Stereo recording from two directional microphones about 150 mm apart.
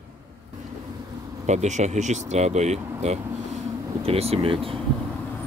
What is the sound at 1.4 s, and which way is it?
Speech, 50° right (ahead or behind).